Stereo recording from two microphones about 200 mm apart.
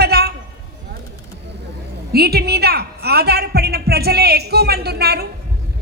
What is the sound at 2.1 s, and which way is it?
A woman's voice, 50° right (ahead or behind).